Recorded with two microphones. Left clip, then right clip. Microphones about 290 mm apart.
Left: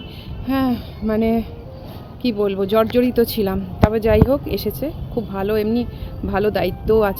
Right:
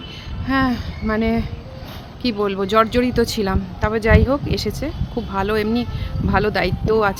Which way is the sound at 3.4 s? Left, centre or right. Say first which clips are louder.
Left 2 dB; centre.